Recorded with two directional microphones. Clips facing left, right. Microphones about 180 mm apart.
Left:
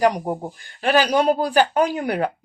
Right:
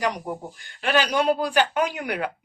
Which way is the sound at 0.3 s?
35° left (ahead or behind).